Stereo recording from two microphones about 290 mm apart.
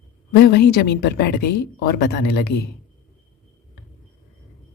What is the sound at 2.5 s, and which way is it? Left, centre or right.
Speech, left.